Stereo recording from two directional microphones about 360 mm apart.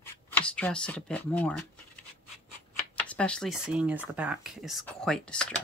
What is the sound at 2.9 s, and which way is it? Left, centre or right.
Speech, centre.